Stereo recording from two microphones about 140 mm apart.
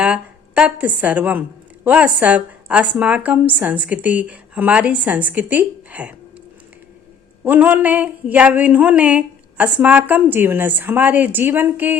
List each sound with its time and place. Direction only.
0.0 s a woman's voice: 10° right (ahead or behind)
7.4 s a woman's voice: 15° right (ahead or behind)